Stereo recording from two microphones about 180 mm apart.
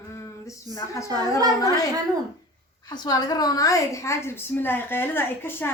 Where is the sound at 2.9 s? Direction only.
20° left (ahead or behind).